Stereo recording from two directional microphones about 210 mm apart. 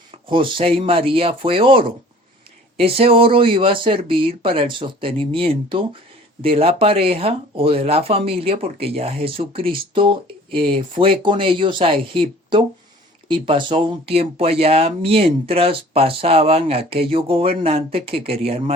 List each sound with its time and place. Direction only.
0.3 s speech: 25° right (ahead or behind)